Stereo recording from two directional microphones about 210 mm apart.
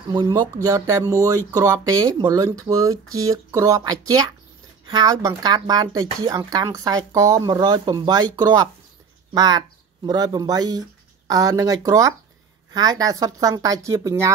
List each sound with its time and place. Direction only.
0.1 s speech: 20° right (ahead or behind)